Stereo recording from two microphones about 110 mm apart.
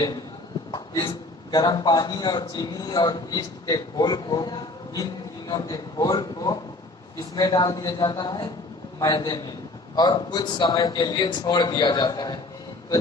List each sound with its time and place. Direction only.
0.7 s a man's voice: 45° left (ahead or behind)